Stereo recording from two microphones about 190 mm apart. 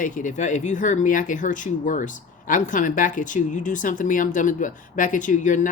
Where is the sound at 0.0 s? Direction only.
45° left (ahead or behind).